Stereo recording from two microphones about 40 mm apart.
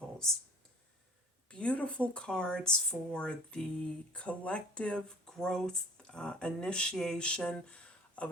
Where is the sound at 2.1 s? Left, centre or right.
Left.